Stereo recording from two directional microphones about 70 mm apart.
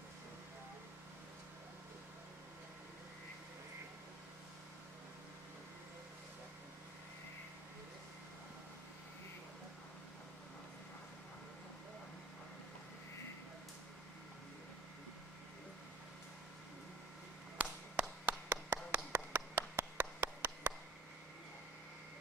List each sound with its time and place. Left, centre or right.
17.6 s clapping: centre